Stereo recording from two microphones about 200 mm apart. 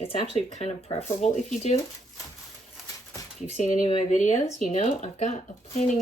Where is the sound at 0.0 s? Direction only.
30° left (ahead or behind).